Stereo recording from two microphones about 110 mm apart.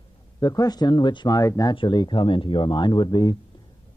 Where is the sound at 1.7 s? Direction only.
45° left (ahead or behind).